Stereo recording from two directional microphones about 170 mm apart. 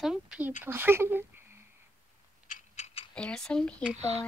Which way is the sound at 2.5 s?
40° left (ahead or behind).